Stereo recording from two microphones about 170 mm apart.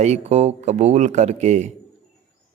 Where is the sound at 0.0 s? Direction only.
40° right (ahead or behind).